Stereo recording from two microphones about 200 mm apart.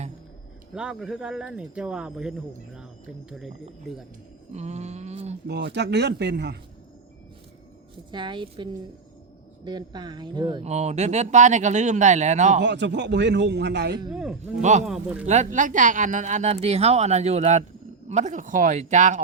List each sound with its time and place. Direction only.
0.7 s speech: 5° right (ahead or behind)
4.5 s a woman's voice: 35° right (ahead or behind)
5.5 s a man's voice: 55° right (ahead or behind)
8.1 s speech: 25° right (ahead or behind)
10.7 s a woman's voice: 35° right (ahead or behind)
12.6 s a man's voice: 60° right (ahead or behind)
14.1 s speech: 5° right (ahead or behind)
14.6 s a woman's voice: 35° right (ahead or behind)
14.8 s speech: 5° right (ahead or behind)
15.3 s a woman's voice: 35° right (ahead or behind)